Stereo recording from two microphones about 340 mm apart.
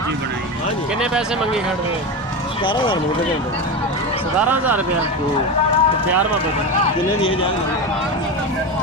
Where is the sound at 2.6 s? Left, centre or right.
Centre.